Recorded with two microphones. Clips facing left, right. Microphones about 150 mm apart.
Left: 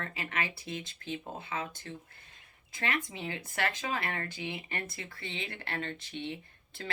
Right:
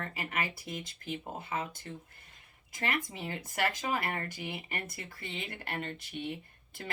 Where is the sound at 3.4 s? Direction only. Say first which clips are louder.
Right 2 dB; 10° right (ahead or behind).